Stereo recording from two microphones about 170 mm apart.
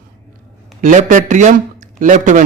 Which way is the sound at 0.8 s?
50° right (ahead or behind).